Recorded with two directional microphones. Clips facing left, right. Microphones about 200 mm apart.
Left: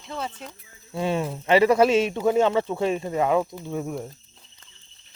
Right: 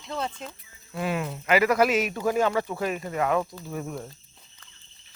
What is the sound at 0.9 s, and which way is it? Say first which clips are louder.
Speech: left 4 dB; 25° left (ahead or behind).